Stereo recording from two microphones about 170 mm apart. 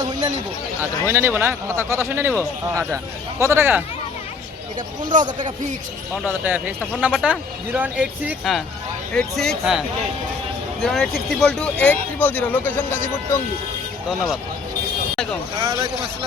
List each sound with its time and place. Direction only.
0.8 s speech: 15° right (ahead or behind)
5.1 s speech: 50° right (ahead or behind)
6.2 s speech: 10° right (ahead or behind); by 13.4 s 10° left (ahead or behind)
15.1 s vehicle: centre (ahead or behind)
15.6 s speech: 30° right (ahead or behind)